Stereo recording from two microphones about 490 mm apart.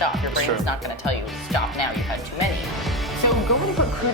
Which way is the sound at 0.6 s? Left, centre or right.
Left.